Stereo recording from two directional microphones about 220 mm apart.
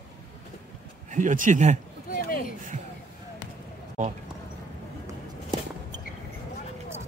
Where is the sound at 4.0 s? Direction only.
35° right (ahead or behind).